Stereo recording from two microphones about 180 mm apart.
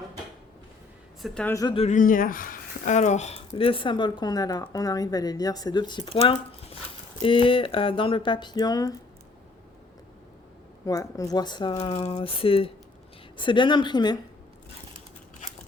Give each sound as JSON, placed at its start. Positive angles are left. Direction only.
{"t": 1.2, "sound": "speech", "side_deg": 5}
{"t": 1.5, "sound": "speech", "side_deg": 25}
{"t": 1.8, "sound": "speech", "side_deg": 45}
{"t": 10.8, "sound": "speech", "side_deg": 20}